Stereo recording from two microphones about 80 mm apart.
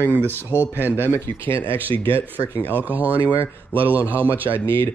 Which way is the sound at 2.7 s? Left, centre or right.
Right.